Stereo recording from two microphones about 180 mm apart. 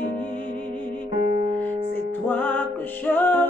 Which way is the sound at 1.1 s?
50° left (ahead or behind).